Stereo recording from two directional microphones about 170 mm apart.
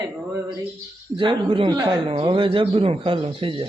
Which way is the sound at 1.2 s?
30° right (ahead or behind).